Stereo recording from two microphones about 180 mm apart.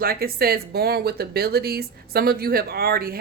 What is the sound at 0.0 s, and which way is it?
Speech, 55° right (ahead or behind).